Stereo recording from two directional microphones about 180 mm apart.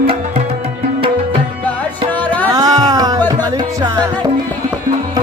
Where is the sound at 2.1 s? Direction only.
10° left (ahead or behind).